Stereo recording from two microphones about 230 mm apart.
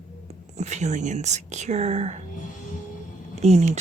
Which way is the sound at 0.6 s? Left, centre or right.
Right.